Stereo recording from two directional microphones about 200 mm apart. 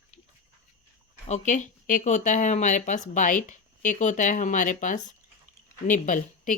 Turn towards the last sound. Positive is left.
turn(degrees=40)  # may be behind; listen again after turning